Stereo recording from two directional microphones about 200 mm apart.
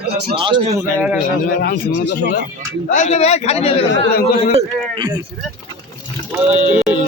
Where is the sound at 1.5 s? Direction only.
45° left (ahead or behind).